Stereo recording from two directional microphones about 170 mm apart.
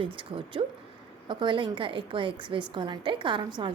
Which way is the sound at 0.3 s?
30° right (ahead or behind).